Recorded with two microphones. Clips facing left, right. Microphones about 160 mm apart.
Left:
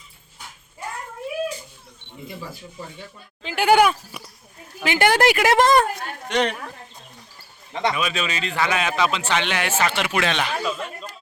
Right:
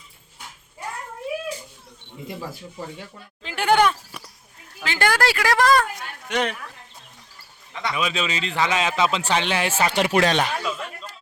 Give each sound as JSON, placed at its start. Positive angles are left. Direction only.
{"t": 3.4, "sound": "a woman's voice", "side_deg": 5}
{"t": 6.2, "sound": "speech", "side_deg": -5}
{"t": 7.9, "sound": "speech", "side_deg": -20}
{"t": 10.6, "sound": "a sound", "side_deg": 0}